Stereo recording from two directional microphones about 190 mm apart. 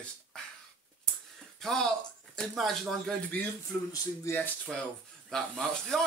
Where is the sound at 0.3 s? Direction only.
5° left (ahead or behind).